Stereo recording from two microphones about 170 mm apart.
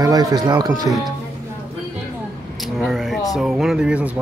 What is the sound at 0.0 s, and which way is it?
Speech, 20° right (ahead or behind).